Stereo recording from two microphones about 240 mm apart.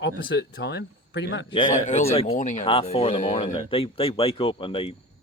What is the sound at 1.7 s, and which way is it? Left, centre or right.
Speech, left.